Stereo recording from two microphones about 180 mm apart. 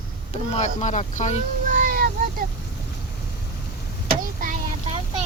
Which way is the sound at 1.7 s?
50° right (ahead or behind).